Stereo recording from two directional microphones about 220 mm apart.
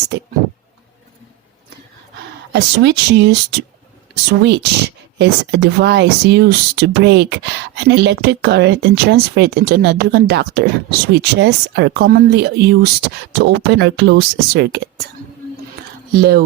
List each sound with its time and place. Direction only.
2.5 s speech: 50° right (ahead or behind)
16.1 s speech: 45° right (ahead or behind)